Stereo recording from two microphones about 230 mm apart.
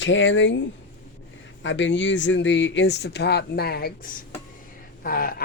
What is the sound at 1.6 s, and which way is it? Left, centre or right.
Speech, left.